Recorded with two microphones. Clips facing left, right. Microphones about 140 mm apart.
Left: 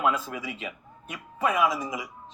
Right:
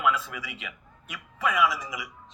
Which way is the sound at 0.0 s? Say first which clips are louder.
Left 1 dB; 35° left (ahead or behind).